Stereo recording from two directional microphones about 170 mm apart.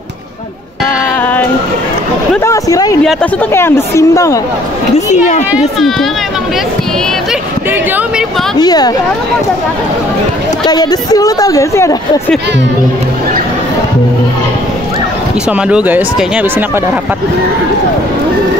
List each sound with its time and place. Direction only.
2.4 s a woman's voice: 20° left (ahead or behind)
4.9 s speech: 45° left (ahead or behind)
5.5 s speech: centre (ahead or behind)
8.5 s speech: 25° left (ahead or behind)
10.6 s speech: 25° left (ahead or behind)
15.5 s speech: 10° right (ahead or behind)